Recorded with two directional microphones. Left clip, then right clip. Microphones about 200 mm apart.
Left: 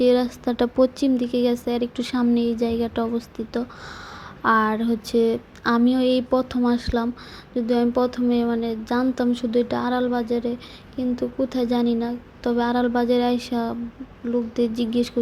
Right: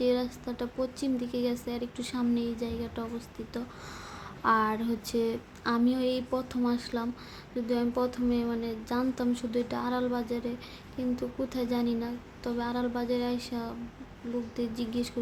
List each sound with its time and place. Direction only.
0.0 s speech: 25° left (ahead or behind)
14.8 s speech: 25° left (ahead or behind)